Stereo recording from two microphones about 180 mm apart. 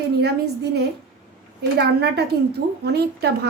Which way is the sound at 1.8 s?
65° right (ahead or behind).